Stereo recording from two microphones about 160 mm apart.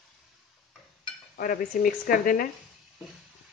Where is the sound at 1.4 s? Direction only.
60° left (ahead or behind).